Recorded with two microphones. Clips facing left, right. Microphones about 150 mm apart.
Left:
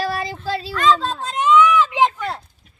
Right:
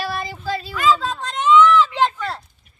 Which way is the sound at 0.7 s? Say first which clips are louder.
Left 1 dB; 5° right (ahead or behind).